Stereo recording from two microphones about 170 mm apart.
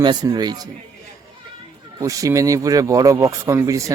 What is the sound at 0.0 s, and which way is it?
Speech, 25° right (ahead or behind).